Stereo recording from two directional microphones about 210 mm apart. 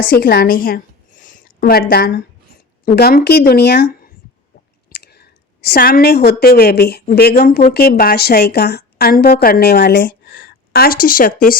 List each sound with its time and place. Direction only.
0.1 s a woman's voice: 40° left (ahead or behind)